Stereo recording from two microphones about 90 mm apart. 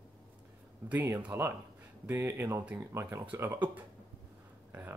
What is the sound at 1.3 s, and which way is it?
Speech, 30° right (ahead or behind).